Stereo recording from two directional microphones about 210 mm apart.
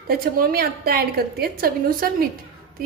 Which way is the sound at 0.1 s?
45° right (ahead or behind).